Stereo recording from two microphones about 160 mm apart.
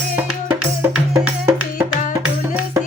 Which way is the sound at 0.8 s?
20° right (ahead or behind).